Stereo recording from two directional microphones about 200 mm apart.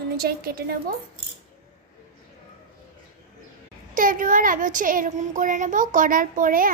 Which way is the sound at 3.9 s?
45° right (ahead or behind).